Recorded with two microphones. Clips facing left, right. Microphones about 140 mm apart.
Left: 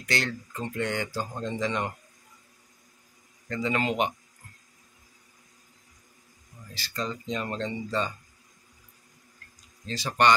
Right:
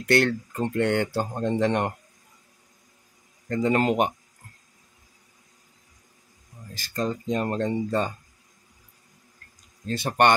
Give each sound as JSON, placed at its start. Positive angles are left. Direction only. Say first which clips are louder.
{"t": 0.0, "sound": "speech", "louder": "right 9 dB", "side_deg": -60}
{"t": 3.4, "sound": "speech", "louder": "right 6 dB", "side_deg": -45}
{"t": 6.7, "sound": "speech", "louder": "right 5 dB", "side_deg": -45}
{"t": 9.8, "sound": "speech", "louder": "right 3 dB", "side_deg": -55}